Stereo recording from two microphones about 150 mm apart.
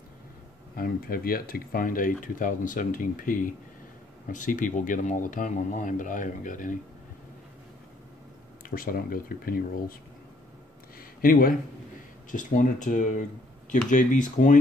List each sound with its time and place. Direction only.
0.7 s speech: 75° left (ahead or behind)
8.6 s speech: 75° left (ahead or behind)
11.0 s a sound: 70° left (ahead or behind)
12.3 s speech: 60° left (ahead or behind)